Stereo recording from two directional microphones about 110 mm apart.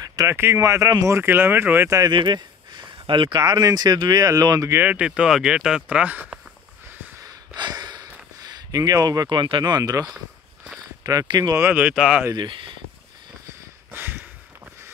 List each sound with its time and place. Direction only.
0.0 s speech: 30° right (ahead or behind)
2.0 s speech: 40° right (ahead or behind)
4.7 s speech: 15° right (ahead or behind)
7.2 s a sound: 40° right (ahead or behind)
8.5 s speech: 35° right (ahead or behind)
11.5 s speech: 20° right (ahead or behind)
11.9 s speech: 5° right (ahead or behind)
12.4 s speech: 50° right (ahead or behind)
13.9 s a sound: 20° right (ahead or behind)